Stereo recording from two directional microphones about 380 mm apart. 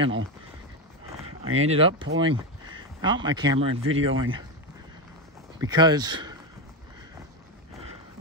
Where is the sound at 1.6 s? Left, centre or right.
Centre.